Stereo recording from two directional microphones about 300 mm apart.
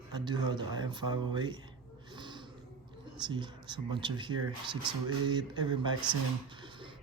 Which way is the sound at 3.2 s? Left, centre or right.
Centre.